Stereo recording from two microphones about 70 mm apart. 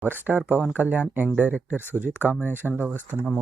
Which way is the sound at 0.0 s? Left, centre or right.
Right.